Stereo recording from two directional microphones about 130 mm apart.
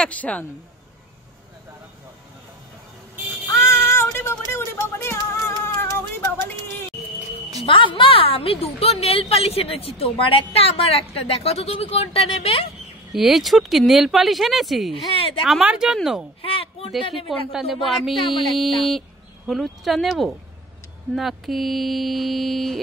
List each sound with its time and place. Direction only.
0.0 s speech: 10° left (ahead or behind)
3.5 s a sound: 20° left (ahead or behind)
7.6 s a woman's voice: 45° left (ahead or behind)
13.1 s speech: centre (ahead or behind)
16.4 s speech: 45° left (ahead or behind)
17.3 s speech: 5° right (ahead or behind)